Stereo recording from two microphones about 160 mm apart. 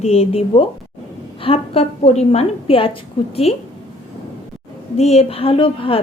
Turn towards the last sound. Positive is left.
turn(degrees=35)  # may be behind; listen again after turning